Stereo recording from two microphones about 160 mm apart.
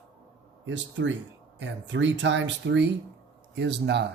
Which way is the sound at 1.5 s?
90° right.